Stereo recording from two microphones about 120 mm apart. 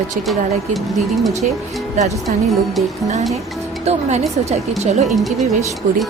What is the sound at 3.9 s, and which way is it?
Speech, 65° right (ahead or behind).